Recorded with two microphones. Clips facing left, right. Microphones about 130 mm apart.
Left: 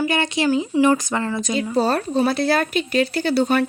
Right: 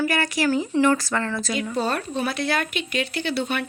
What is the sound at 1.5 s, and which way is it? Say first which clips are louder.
A woman's voice: left 6 dB; 30° left (ahead or behind).